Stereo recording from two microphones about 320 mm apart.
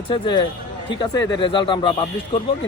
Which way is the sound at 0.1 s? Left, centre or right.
Centre.